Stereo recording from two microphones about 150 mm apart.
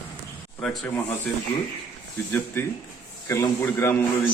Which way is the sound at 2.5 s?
15° left (ahead or behind).